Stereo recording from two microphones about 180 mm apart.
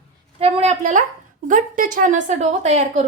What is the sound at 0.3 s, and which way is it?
A woman's voice, 30° right (ahead or behind).